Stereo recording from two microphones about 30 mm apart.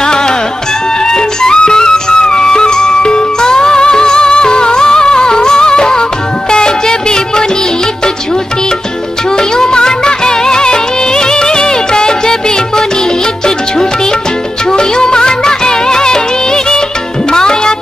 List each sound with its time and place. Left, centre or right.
0.0 s music: left
9.4 s music: left
14.7 s music: left